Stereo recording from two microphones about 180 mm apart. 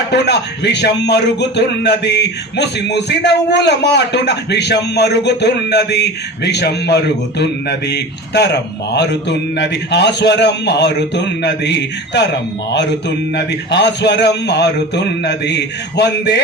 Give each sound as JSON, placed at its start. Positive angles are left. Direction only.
{"t": 0.1, "sound": "a man's voice", "side_deg": 70}
{"t": 13.3, "sound": "a man's voice", "side_deg": 75}